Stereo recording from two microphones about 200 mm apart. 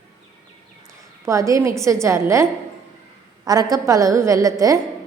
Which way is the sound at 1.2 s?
15° right (ahead or behind).